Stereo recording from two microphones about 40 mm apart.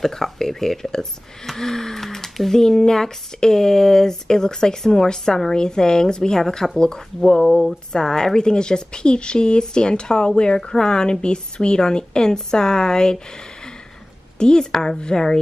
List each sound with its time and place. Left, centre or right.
0.0 s speech: centre
14.4 s speech: centre